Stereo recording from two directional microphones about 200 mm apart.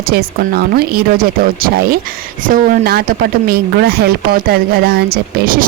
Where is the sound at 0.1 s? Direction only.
50° right (ahead or behind).